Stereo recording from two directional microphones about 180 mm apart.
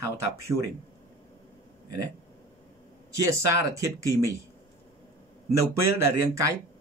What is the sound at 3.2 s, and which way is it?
Speech, 15° right (ahead or behind).